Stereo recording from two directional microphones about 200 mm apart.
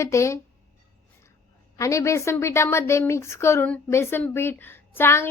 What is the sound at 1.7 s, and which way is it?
A woman's voice, 15° left (ahead or behind).